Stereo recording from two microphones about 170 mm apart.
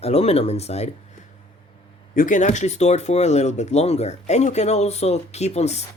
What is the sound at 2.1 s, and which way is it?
Speech, 50° left (ahead or behind).